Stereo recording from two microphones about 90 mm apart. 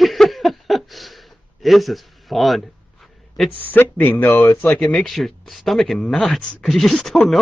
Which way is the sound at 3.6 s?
20° left (ahead or behind).